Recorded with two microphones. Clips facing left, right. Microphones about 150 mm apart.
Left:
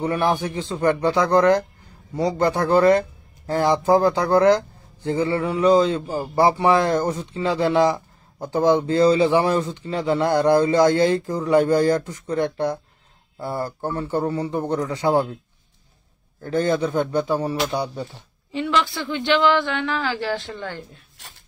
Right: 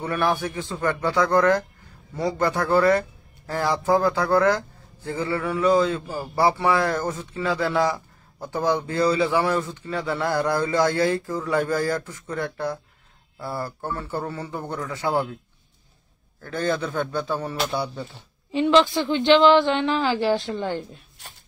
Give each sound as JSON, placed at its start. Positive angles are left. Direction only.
{"t": 0.0, "sound": "a man's voice", "side_deg": 15}
{"t": 16.3, "sound": "a man's voice", "side_deg": 20}
{"t": 18.5, "sound": "speech", "side_deg": -20}